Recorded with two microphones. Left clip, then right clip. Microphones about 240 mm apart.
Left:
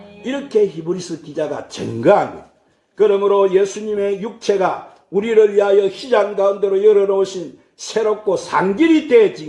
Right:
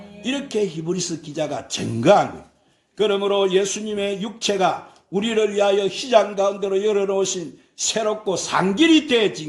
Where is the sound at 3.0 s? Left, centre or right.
Right.